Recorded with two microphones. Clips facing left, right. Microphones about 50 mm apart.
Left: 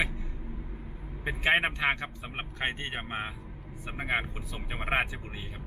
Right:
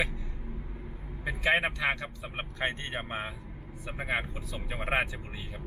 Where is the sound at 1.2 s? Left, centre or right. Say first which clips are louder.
Left 1 dB; left.